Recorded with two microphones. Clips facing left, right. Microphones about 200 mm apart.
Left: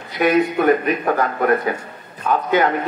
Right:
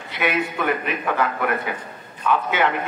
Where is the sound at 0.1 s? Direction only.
40° left (ahead or behind).